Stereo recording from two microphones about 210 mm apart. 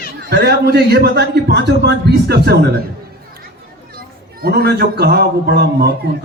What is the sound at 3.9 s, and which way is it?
A man's voice, 45° right (ahead or behind).